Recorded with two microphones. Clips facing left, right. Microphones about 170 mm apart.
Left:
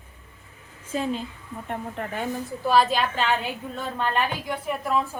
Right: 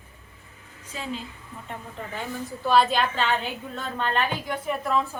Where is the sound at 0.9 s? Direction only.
45° left (ahead or behind).